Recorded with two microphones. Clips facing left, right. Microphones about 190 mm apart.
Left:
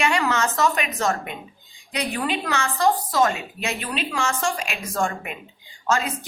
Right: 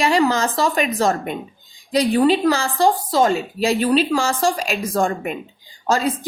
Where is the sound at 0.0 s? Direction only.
35° right (ahead or behind).